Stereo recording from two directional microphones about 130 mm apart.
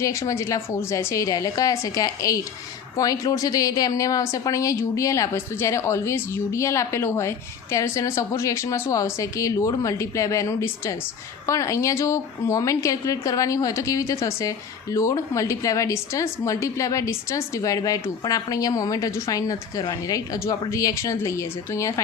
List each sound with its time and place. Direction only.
0.0 s a woman's voice: 25° left (ahead or behind)